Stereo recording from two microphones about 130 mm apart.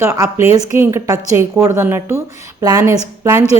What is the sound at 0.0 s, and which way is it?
A woman's voice, 20° right (ahead or behind).